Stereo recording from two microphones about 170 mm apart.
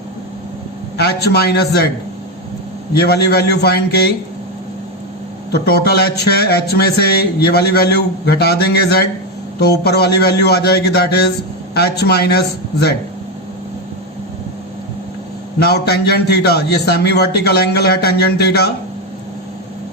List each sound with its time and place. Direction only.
0.9 s a man's voice: 75° left (ahead or behind)
2.9 s a man's voice: 70° left (ahead or behind)
5.5 s a man's voice: 70° left (ahead or behind)
15.5 s a man's voice: 70° left (ahead or behind)